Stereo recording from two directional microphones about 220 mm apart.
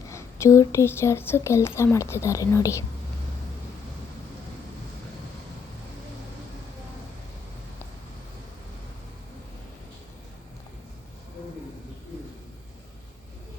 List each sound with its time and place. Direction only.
0.1 s speech: 15° left (ahead or behind)